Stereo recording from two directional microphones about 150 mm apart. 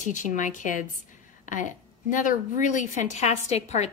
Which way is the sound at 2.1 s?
60° left (ahead or behind).